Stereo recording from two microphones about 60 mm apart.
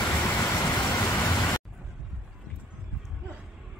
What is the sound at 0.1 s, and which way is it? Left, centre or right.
Vehicle, left.